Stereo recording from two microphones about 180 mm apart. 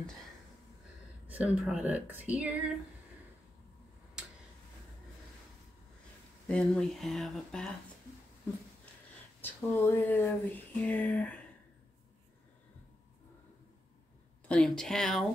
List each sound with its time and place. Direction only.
1.2 s speech: 10° right (ahead or behind)
6.4 s speech: 5° left (ahead or behind)
9.4 s speech: 10° left (ahead or behind)
14.5 s speech: 5° left (ahead or behind)